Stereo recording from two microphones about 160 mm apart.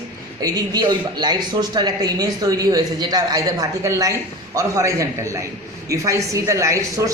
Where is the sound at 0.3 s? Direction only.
25° right (ahead or behind).